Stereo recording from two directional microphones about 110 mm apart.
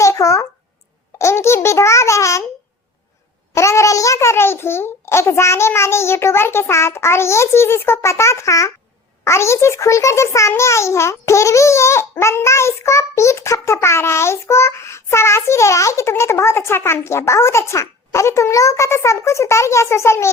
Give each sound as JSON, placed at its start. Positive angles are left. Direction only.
{"t": 0.0, "sound": "a sound", "side_deg": 30}
{"t": 1.2, "sound": "a child's voice", "side_deg": 25}
{"t": 3.5, "sound": "a child's voice", "side_deg": 25}